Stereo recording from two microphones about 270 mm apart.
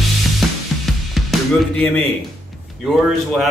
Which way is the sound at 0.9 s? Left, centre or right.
Centre.